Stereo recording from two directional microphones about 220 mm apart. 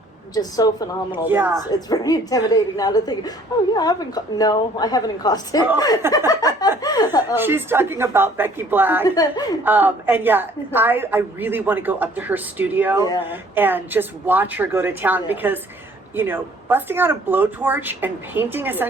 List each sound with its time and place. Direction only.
0.3 s a woman's voice: 15° left (ahead or behind)
1.2 s a woman's voice: 10° right (ahead or behind)
1.7 s a woman's voice: 15° left (ahead or behind)
7.3 s a woman's voice: 10° right (ahead or behind)
9.0 s a woman's voice: 15° left (ahead or behind)
9.6 s a woman's voice: 10° right (ahead or behind)